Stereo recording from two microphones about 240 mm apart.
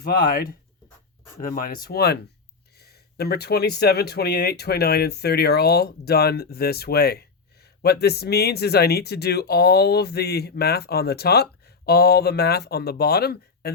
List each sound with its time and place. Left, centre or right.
0.0 s speech: left